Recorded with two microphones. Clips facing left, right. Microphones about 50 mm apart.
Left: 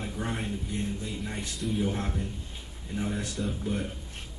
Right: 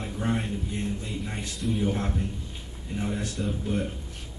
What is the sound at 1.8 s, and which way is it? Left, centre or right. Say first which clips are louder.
Speech: right 3 dB; centre.